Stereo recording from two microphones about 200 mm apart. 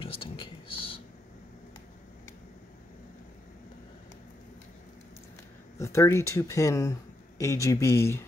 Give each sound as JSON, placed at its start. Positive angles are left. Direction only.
{"t": 0.0, "sound": "whispering", "side_deg": 25}
{"t": 5.8, "sound": "speech", "side_deg": 15}